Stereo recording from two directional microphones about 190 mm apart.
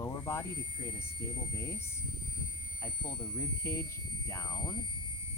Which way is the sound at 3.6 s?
15° left (ahead or behind).